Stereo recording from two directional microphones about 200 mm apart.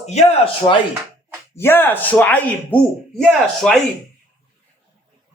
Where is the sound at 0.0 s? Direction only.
35° left (ahead or behind).